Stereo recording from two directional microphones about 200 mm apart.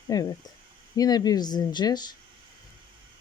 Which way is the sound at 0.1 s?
20° left (ahead or behind).